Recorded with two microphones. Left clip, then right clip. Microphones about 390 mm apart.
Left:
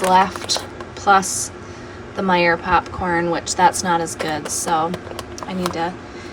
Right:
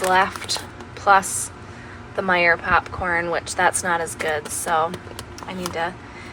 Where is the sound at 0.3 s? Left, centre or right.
Centre.